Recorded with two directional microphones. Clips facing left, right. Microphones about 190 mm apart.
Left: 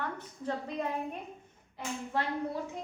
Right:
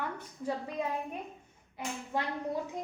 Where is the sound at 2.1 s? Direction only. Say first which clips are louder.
Left 1 dB; 15° right (ahead or behind).